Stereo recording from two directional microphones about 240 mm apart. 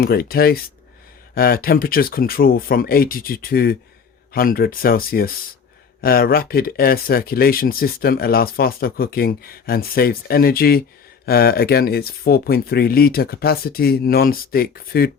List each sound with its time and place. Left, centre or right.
0.0 s speech: left